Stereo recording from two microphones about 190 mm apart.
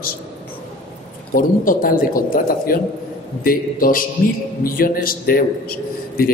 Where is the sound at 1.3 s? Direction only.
45° left (ahead or behind).